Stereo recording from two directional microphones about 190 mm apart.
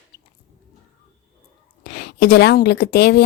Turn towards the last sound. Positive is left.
turn(degrees=60)  # may be behind; listen again after turning